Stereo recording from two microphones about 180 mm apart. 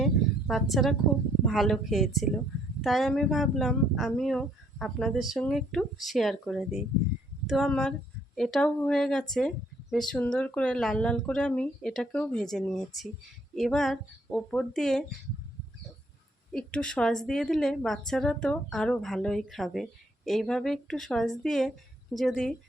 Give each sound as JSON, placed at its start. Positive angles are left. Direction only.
{"t": 0.0, "sound": "a sound", "side_deg": 0}
{"t": 1.5, "sound": "a woman's voice", "side_deg": 0}
{"t": 16.5, "sound": "a woman's voice", "side_deg": 5}